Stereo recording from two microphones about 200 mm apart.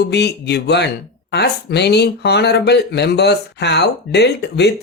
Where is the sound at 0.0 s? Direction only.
55° left (ahead or behind).